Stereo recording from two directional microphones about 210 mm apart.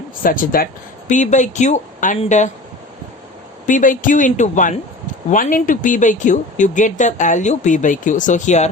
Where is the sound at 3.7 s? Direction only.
40° left (ahead or behind).